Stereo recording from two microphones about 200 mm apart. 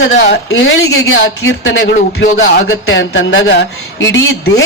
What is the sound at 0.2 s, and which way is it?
A man's voice, 70° left (ahead or behind).